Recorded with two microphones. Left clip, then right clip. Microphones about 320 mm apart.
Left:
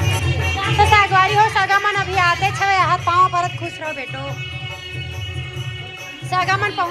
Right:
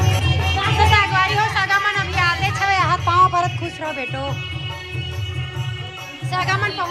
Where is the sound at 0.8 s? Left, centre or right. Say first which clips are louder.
Left 4 dB; centre.